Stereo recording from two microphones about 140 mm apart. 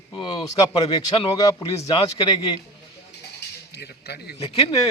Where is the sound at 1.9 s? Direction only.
35° left (ahead or behind).